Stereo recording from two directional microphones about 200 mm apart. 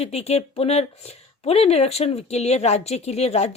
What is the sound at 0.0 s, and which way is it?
Speech, 30° left (ahead or behind).